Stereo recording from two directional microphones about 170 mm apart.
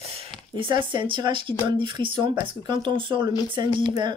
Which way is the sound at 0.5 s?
30° right (ahead or behind).